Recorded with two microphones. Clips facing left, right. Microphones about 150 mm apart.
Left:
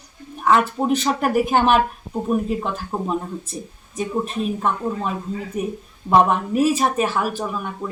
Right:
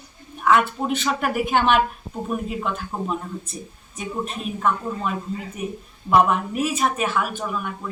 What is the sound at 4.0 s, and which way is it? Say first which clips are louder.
A woman's voice: left 5 dB; 30° left (ahead or behind).